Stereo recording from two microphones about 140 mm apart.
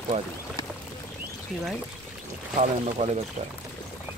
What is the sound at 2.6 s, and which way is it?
Speech, 50° right (ahead or behind).